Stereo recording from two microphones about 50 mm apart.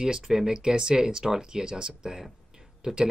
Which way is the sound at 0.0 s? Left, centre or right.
Centre.